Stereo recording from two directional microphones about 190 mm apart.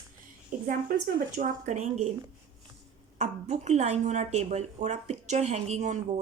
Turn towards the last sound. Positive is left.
turn(degrees=-40)  # may be behind; listen again after turning